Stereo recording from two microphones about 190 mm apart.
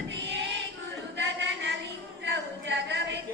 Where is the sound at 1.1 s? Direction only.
70° right (ahead or behind).